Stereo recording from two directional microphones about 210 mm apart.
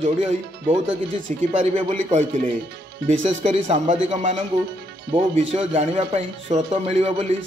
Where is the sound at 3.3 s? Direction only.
30° right (ahead or behind).